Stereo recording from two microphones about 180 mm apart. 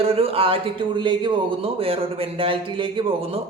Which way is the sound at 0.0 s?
35° right (ahead or behind).